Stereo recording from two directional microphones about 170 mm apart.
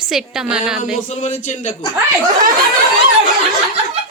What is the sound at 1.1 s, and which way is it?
Speech, 45° left (ahead or behind).